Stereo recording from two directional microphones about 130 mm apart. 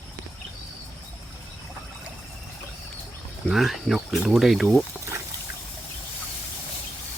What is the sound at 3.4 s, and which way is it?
Speech, centre (ahead or behind).